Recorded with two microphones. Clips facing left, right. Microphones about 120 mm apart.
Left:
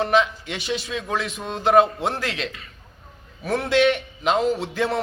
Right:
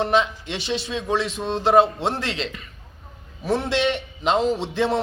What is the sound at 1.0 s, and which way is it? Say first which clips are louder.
A man's voice: right 3 dB; 5° left (ahead or behind).